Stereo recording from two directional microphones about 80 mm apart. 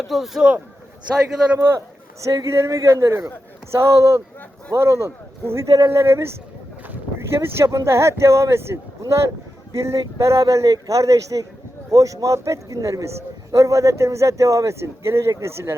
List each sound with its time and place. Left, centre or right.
0.0 s speech: centre
1.5 s a man's voice: right